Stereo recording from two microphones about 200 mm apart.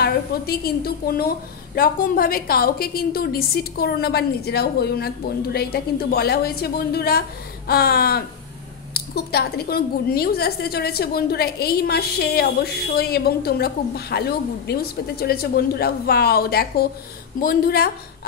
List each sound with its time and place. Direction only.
0.0 s a woman's voice: 50° left (ahead or behind)